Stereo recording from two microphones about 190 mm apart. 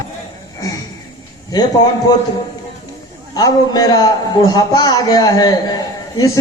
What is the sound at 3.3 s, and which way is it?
A man's voice, 20° left (ahead or behind).